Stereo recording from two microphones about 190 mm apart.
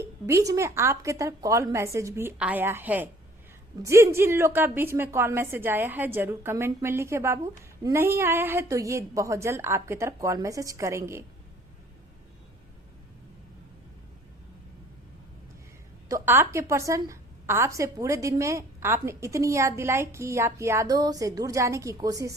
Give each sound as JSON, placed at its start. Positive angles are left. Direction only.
{"t": 0.3, "sound": "a woman's voice", "side_deg": -15}
{"t": 16.0, "sound": "a woman's voice", "side_deg": -15}